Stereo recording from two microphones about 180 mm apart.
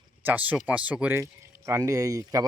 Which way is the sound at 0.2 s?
10° right (ahead or behind).